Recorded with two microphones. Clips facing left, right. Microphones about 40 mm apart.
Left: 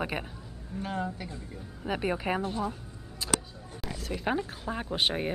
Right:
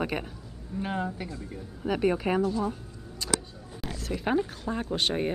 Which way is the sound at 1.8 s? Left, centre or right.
Centre.